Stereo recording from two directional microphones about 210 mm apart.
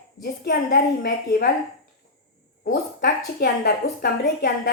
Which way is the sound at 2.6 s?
50° left (ahead or behind).